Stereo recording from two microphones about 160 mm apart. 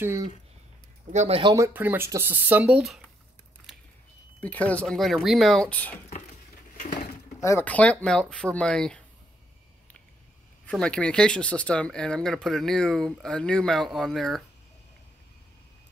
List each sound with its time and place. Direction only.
0.0 s speech: 20° right (ahead or behind)
1.1 s speech: 45° right (ahead or behind)
1.4 s speech: 20° right (ahead or behind)
4.4 s speech: 10° left (ahead or behind)
7.4 s speech: 10° left (ahead or behind)
10.6 s speech: 5° left (ahead or behind)